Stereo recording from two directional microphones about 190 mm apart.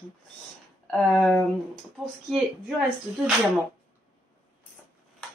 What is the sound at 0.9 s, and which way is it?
Speech, centre (ahead or behind).